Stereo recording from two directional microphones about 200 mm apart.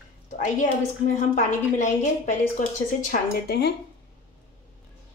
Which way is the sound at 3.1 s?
55° left (ahead or behind).